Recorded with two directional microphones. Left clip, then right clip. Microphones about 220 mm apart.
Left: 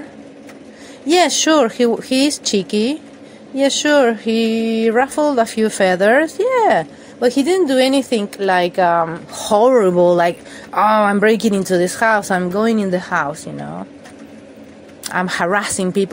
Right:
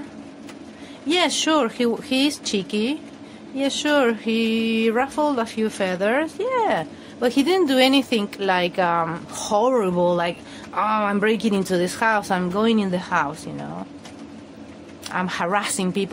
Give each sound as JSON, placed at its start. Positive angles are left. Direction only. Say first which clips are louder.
{"t": 1.0, "sound": "speech", "louder": "left 7 dB", "side_deg": 25}
{"t": 9.5, "sound": "speech", "louder": "left 8 dB", "side_deg": 25}
{"t": 15.0, "sound": "speech", "louder": "left 6 dB", "side_deg": 20}